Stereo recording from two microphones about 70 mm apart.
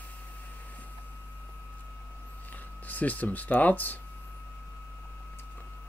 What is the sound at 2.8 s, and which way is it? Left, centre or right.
Speech, left.